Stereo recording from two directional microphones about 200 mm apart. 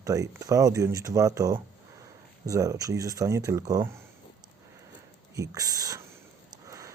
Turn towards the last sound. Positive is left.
turn(degrees=-15)  # may be behind; listen again after turning